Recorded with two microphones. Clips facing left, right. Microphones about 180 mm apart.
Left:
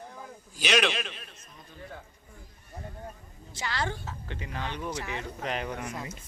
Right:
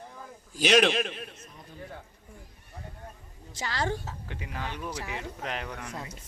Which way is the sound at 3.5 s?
40° right (ahead or behind).